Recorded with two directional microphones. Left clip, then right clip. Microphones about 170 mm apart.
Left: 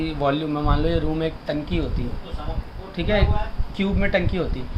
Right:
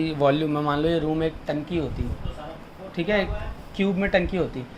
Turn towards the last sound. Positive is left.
turn(degrees=-25)  # may be behind; listen again after turning